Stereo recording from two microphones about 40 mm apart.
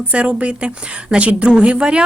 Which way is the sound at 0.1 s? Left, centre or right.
Right.